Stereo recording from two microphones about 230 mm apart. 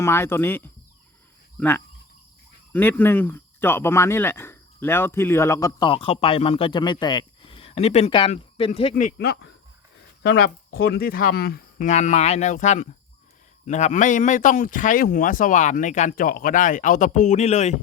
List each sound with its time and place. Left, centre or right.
0.0 s speech: centre; by 9.1 s left
9.1 s a man's voice: left